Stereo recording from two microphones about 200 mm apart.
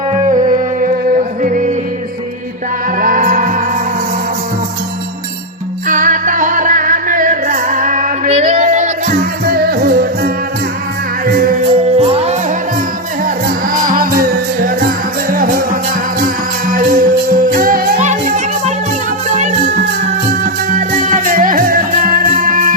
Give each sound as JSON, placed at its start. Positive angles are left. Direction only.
{"t": 0.3, "sound": "music", "side_deg": -40}
{"t": 3.0, "sound": "music", "side_deg": -45}
{"t": 5.9, "sound": "music", "side_deg": -40}
{"t": 13.7, "sound": "music", "side_deg": -40}